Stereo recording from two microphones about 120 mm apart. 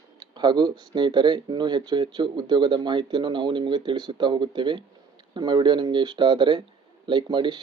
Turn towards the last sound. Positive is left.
turn(degrees=-40)  # may be behind; listen again after turning